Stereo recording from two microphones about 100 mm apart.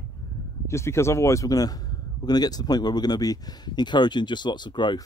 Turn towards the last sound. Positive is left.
turn(degrees=50)  # may be behind; listen again after turning